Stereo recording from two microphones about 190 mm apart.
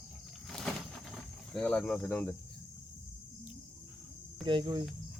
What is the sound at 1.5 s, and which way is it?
Speech, 5° left (ahead or behind).